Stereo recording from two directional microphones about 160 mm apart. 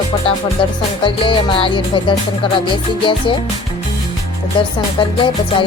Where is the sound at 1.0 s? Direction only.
30° left (ahead or behind).